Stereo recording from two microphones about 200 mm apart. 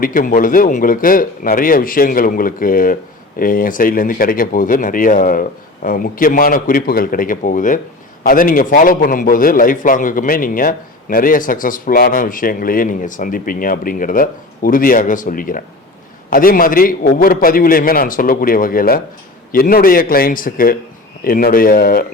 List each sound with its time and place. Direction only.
0.0 s speech: 40° left (ahead or behind)